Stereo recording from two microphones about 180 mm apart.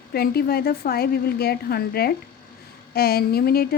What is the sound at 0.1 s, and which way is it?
A woman's voice, 60° left (ahead or behind).